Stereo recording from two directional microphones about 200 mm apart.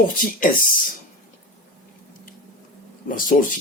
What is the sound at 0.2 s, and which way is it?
Speech, 45° left (ahead or behind).